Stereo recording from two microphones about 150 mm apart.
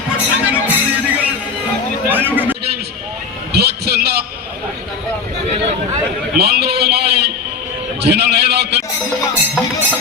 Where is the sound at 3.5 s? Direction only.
90° right.